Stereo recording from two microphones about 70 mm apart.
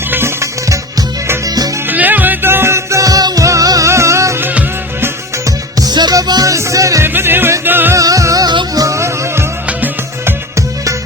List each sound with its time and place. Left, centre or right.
0.1 s music: right
1.5 s music: right
1.9 s music: right
4.4 s music: right
5.5 s music: right
6.1 s music: right
6.5 s music: right
7.0 s music: right
7.9 s music: right
9.0 s music: right